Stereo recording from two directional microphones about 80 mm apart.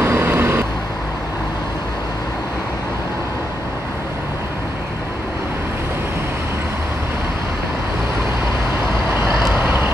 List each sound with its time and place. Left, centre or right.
0.0 s vehicle: right
9.6 s vehicle: right